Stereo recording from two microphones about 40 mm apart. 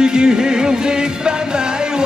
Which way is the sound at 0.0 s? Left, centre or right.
Centre.